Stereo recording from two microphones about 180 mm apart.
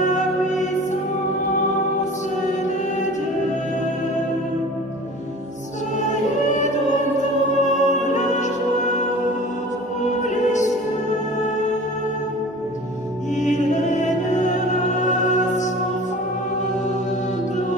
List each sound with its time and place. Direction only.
0.0 s music: 40° left (ahead or behind)
7.6 s music: 40° left (ahead or behind)
10.2 s music: 40° left (ahead or behind)
13.4 s music: 40° left (ahead or behind)